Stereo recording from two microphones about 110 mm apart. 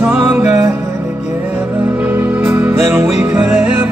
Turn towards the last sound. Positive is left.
turn(degrees=-20)  # may be behind; listen again after turning